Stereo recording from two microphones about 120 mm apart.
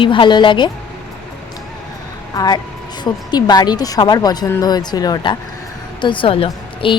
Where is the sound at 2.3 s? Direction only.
35° left (ahead or behind).